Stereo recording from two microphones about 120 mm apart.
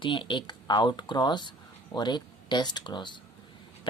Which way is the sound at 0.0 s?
45° left (ahead or behind).